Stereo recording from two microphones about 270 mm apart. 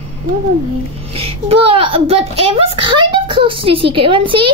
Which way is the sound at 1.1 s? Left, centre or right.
Right.